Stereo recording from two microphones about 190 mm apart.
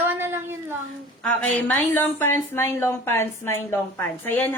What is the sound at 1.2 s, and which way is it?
A woman's voice, 5° left (ahead or behind).